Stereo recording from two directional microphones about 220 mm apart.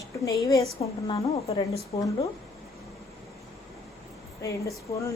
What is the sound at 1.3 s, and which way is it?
Speech, 30° left (ahead or behind).